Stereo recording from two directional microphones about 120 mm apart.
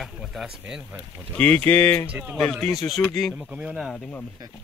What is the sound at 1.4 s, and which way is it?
Speech, 10° left (ahead or behind).